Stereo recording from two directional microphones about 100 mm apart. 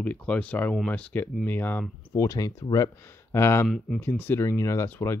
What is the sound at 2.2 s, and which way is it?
Speech, 35° left (ahead or behind).